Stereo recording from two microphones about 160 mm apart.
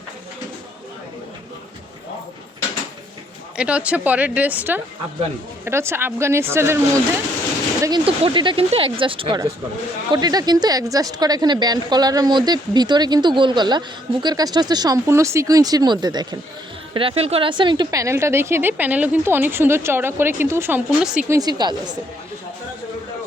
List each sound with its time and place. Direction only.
3.6 s a woman's voice: 5° right (ahead or behind)
21.2 s a woman's voice: 25° right (ahead or behind)